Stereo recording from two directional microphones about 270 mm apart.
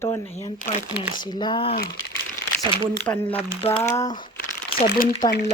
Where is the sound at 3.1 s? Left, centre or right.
Centre.